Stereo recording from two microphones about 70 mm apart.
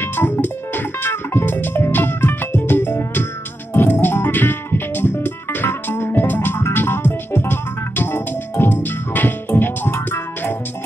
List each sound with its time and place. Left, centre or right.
0.0 s music: left